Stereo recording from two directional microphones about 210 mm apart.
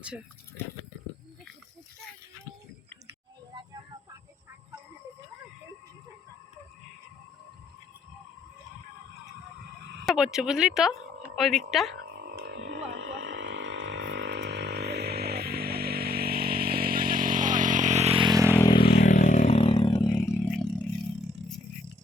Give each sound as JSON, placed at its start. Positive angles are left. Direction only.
{"t": 9.8, "sound": "a sound", "side_deg": -55}
{"t": 10.1, "sound": "speech", "side_deg": -5}
{"t": 12.2, "sound": "frog", "side_deg": -50}
{"t": 18.5, "sound": "vehicle", "side_deg": 15}
{"t": 18.9, "sound": "vehicle", "side_deg": 35}
{"t": 20.5, "sound": "a sound", "side_deg": 5}